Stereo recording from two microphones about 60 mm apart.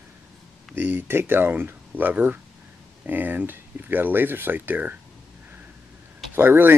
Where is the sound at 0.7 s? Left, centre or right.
Right.